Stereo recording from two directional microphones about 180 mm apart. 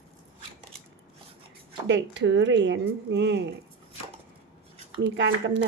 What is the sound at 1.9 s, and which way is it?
Speech, 90° right.